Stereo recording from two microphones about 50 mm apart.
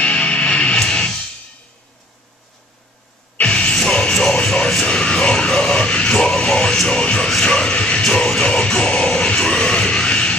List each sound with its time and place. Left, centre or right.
0.0 s music: centre
3.3 s music: left